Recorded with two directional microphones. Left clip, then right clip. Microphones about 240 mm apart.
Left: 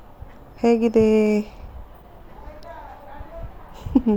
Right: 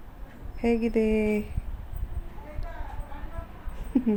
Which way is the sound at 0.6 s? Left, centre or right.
Left.